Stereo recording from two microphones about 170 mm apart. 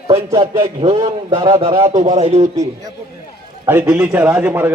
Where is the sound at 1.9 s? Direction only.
45° right (ahead or behind).